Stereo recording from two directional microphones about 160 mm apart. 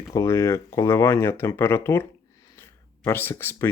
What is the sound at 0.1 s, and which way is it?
Speech, 15° left (ahead or behind).